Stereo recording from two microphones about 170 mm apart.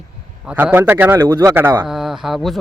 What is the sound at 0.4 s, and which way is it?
A man's voice, 10° right (ahead or behind).